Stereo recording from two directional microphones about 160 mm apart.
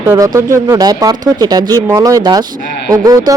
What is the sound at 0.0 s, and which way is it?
Speech, 20° right (ahead or behind).